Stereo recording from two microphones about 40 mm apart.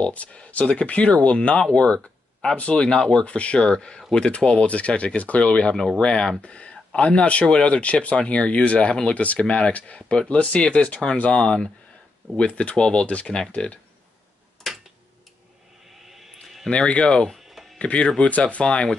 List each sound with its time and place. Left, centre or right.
0.0 s speech: left
2.8 s speech: left
3.3 s speech: left
5.8 s speech: centre
14.7 s a sound: centre
16.1 s a sound: centre
16.7 s speech: left
17.3 s a sound: centre
17.7 s speech: left